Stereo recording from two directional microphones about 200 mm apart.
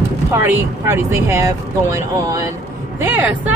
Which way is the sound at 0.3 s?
10° right (ahead or behind).